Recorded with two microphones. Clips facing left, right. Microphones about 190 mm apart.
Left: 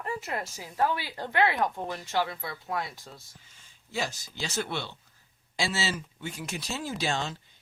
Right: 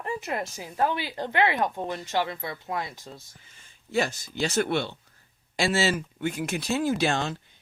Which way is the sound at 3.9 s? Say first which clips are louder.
Right 7 dB; 60° right (ahead or behind).